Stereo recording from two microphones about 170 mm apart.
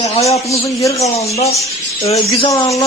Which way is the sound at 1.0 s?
40° left (ahead or behind).